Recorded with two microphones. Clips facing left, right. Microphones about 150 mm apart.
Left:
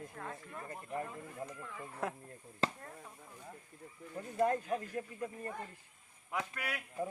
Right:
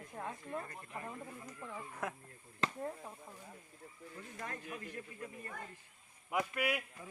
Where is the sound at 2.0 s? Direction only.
30° left (ahead or behind).